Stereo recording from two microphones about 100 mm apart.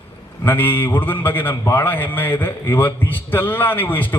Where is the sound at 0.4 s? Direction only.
20° left (ahead or behind).